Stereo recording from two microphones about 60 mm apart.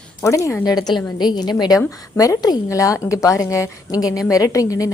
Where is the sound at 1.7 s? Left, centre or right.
Left.